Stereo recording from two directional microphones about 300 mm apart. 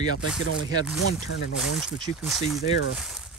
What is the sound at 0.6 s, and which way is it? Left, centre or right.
Speech, centre.